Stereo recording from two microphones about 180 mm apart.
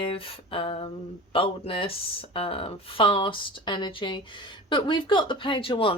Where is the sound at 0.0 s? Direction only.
30° left (ahead or behind).